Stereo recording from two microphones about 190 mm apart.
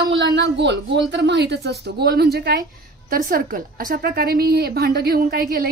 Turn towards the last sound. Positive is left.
turn(degrees=-50)  # may be behind; listen again after turning